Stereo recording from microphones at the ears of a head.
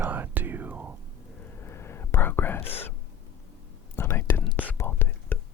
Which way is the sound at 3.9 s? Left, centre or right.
Left.